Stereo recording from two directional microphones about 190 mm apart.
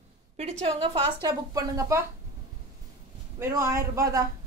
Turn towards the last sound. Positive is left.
turn(degrees=-15)  # may be behind; listen again after turning